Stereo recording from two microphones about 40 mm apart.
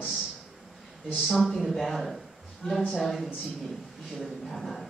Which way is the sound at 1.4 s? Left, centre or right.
Centre.